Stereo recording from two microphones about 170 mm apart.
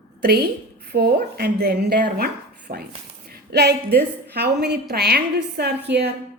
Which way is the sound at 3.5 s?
75° right (ahead or behind).